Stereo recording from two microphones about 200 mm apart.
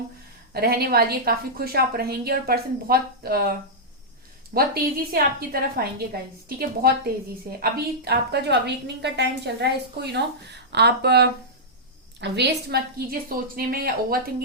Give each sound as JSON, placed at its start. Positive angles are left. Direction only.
{"t": 0.5, "sound": "a woman's voice", "side_deg": -50}
{"t": 4.5, "sound": "a woman's voice", "side_deg": -50}